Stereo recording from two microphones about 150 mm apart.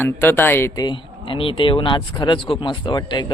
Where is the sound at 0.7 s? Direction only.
30° left (ahead or behind).